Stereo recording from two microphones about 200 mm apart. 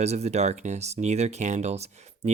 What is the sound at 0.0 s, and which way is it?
Speech, 35° right (ahead or behind).